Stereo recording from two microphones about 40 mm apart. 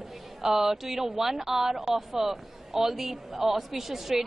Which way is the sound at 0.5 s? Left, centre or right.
Centre.